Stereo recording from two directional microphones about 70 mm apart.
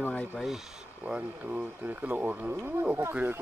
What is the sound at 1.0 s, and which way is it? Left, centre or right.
Speech, centre.